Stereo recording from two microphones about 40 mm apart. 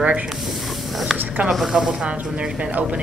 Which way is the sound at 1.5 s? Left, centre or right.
Centre.